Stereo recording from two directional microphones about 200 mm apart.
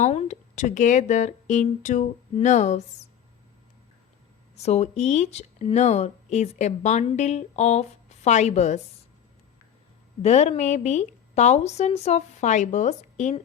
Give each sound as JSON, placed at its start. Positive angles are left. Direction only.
{"t": 0.0, "sound": "speech", "side_deg": 35}
{"t": 4.5, "sound": "speech", "side_deg": 35}
{"t": 10.2, "sound": "speech", "side_deg": 35}